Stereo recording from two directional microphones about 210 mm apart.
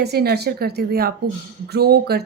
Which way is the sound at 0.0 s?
50° right (ahead or behind).